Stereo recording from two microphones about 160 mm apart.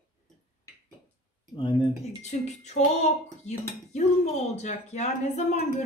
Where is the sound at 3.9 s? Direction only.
45° left (ahead or behind).